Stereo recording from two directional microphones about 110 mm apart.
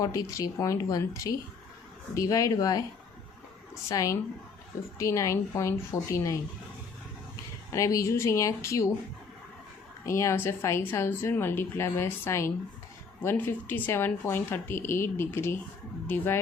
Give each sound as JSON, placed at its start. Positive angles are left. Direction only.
{"t": 0.0, "sound": "speech", "side_deg": 35}
{"t": 3.8, "sound": "speech", "side_deg": 30}
{"t": 7.7, "sound": "speech", "side_deg": 30}
{"t": 10.1, "sound": "speech", "side_deg": 25}